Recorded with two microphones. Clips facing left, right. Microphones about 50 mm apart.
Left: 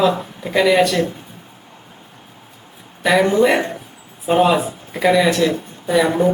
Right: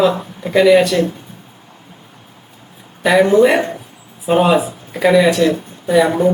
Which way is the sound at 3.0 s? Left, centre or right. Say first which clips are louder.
Right 4 dB; centre.